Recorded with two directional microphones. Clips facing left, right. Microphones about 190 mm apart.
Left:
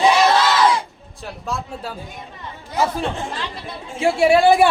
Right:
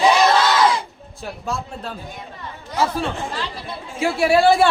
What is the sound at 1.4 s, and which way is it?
Speech, centre (ahead or behind).